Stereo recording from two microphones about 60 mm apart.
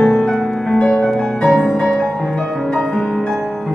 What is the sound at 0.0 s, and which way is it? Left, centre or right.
Music, centre.